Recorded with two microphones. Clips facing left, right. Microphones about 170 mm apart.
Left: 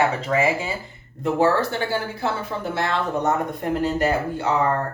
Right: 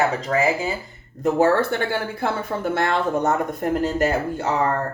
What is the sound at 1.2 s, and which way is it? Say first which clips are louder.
Speech: right 2 dB; 50° right (ahead or behind).